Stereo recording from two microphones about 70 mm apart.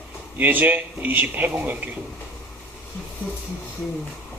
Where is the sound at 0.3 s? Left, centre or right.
Right.